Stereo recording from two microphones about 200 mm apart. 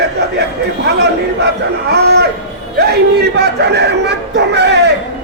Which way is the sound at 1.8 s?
55° right (ahead or behind).